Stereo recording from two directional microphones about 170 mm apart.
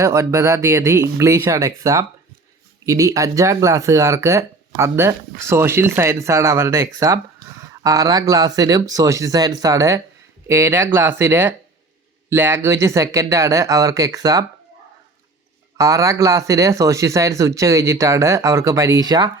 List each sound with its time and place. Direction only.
0.0 s speech: 20° right (ahead or behind)
15.8 s speech: 20° right (ahead or behind)